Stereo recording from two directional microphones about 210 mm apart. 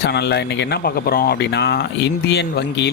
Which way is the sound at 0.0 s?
55° left (ahead or behind).